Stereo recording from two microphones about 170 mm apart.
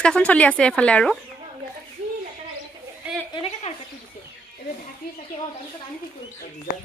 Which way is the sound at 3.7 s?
40° left (ahead or behind).